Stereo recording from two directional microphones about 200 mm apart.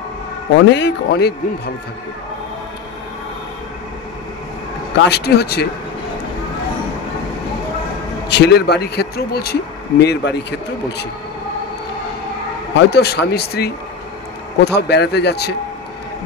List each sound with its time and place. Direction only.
0.7 s a man's voice: 60° left (ahead or behind)
4.9 s speech: 55° left (ahead or behind)
8.4 s speech: 55° left (ahead or behind)
12.7 s a man's voice: 55° left (ahead or behind)